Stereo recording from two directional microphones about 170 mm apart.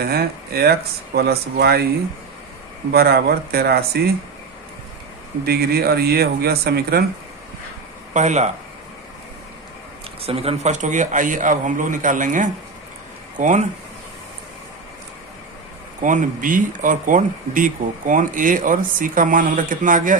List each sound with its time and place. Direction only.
0.0 s speech: 65° right (ahead or behind)
2.9 s speech: 65° right (ahead or behind)
5.5 s speech: 65° right (ahead or behind)
8.1 s speech: 45° right (ahead or behind)
10.2 s speech: 35° right (ahead or behind)
16.0 s speech: 50° right (ahead or behind)